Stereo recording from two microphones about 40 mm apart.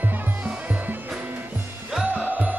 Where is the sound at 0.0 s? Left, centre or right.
Right.